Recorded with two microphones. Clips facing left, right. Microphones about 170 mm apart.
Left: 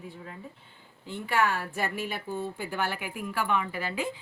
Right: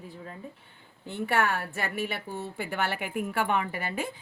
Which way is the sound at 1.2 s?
60° right (ahead or behind).